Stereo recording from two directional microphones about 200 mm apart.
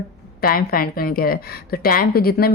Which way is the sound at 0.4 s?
45° left (ahead or behind).